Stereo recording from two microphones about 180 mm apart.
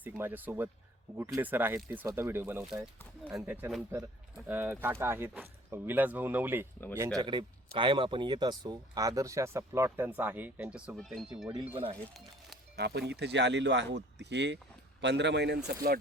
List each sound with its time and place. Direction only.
0.0 s speech: 10° right (ahead or behind)
7.2 s speech: 25° right (ahead or behind); by 11.4 s centre (ahead or behind)
11.7 s speech: 30° right (ahead or behind)
12.7 s speech: 65° right (ahead or behind)